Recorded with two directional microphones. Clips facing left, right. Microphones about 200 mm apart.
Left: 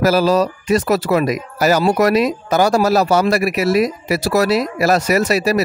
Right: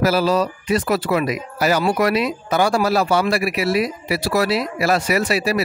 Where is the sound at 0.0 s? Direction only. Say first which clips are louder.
Left 3 dB; 45° left (ahead or behind).